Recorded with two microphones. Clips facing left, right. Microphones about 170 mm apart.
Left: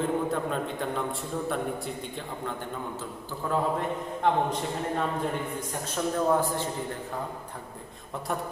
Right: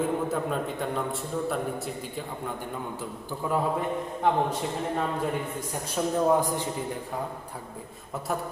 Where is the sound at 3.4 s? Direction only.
10° right (ahead or behind).